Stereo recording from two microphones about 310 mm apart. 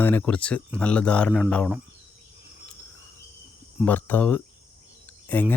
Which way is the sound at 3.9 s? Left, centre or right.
Centre.